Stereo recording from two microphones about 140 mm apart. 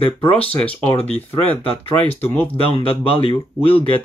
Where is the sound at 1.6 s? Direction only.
40° left (ahead or behind).